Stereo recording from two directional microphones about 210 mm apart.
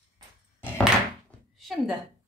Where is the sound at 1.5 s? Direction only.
Centre (ahead or behind).